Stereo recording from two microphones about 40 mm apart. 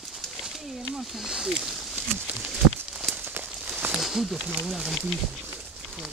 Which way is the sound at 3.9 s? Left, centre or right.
Centre.